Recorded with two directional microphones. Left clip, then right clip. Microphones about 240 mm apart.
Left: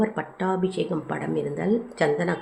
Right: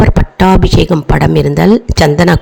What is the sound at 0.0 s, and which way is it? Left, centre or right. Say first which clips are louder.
Speech: right 16 dB; right.